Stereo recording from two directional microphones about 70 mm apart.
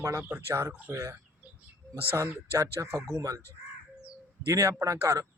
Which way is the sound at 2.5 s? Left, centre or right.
Right.